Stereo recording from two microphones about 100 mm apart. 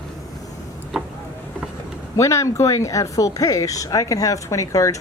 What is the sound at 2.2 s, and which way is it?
Speech, 30° left (ahead or behind).